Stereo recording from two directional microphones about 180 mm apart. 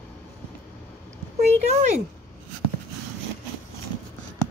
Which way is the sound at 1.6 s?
40° right (ahead or behind).